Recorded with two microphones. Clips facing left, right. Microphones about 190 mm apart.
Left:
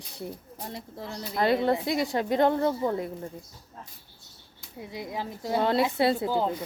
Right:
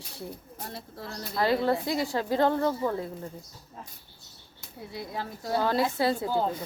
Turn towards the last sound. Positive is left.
turn(degrees=20)  # may be behind; listen again after turning